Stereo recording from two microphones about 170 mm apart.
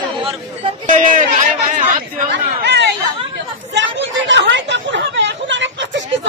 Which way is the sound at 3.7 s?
90° right.